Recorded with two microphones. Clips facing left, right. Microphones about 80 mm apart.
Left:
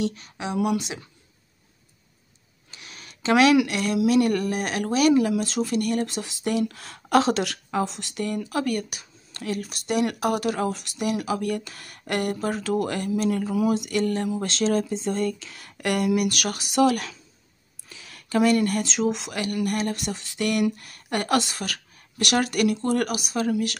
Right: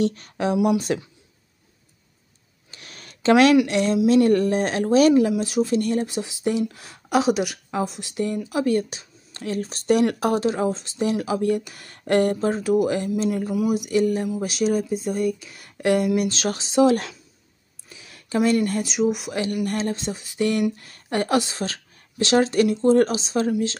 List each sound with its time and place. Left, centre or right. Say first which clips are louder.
0.0 s speech: right 6 dB; right
2.7 s a sound: right 1 dB; right
3.6 s speech: right 4 dB; right
5.3 s a woman's voice: right 3 dB; centre
8.0 s speech: right 3 dB; right
12.1 s speech: right 7 dB; right
12.4 s a woman's voice: right 5 dB; centre
18.0 s speech: even; right
18.9 s a woman's voice: right 3 dB; centre
19.2 s speech: right 2 dB; right